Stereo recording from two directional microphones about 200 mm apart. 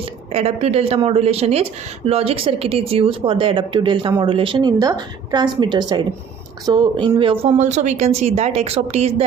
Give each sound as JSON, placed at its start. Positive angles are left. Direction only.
{"t": 0.3, "sound": "a woman's voice", "side_deg": -30}